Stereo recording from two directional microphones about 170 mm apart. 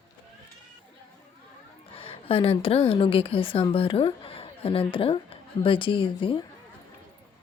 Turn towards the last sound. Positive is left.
turn(degrees=30)  # may be behind; listen again after turning